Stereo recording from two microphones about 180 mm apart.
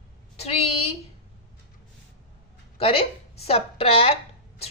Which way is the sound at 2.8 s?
30° left (ahead or behind).